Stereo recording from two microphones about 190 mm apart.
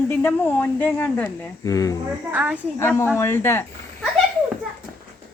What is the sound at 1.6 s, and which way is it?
Speech, 20° left (ahead or behind).